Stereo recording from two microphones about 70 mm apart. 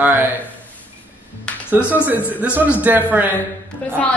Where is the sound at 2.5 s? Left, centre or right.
Right.